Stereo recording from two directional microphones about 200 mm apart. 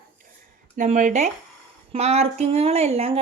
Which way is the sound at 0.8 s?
40° right (ahead or behind).